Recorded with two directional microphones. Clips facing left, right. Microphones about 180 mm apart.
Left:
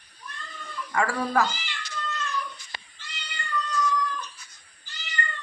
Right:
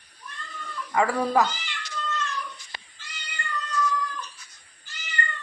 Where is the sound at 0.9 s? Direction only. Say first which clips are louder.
Right 3 dB; 20° right (ahead or behind).